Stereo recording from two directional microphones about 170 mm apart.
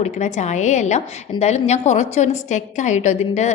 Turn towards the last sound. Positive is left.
turn(degrees=45)  # may be behind; listen again after turning